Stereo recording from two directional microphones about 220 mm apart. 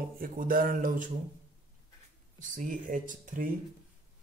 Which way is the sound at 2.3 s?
35° right (ahead or behind).